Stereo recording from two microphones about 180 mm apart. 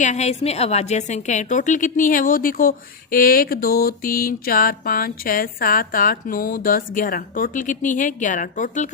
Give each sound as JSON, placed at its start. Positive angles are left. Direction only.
{"t": 0.0, "sound": "a woman's voice", "side_deg": 40}